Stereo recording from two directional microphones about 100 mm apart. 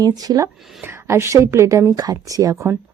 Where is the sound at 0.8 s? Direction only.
25° right (ahead or behind).